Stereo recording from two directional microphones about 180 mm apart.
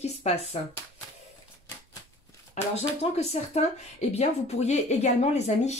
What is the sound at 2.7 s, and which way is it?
Speech, 35° left (ahead or behind).